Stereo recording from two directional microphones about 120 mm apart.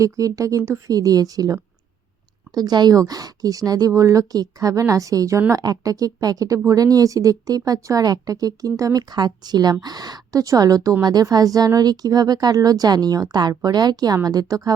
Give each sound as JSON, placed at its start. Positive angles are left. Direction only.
{"t": 0.0, "sound": "speech", "side_deg": -30}
{"t": 2.6, "sound": "speech", "side_deg": -35}